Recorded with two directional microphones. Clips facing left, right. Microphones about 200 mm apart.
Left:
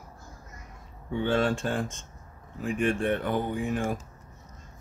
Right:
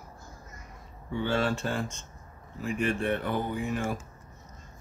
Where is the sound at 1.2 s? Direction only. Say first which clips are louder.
Left 3 dB; 50° left (ahead or behind).